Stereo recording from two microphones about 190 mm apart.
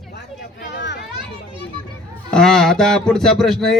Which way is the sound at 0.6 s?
65° left (ahead or behind).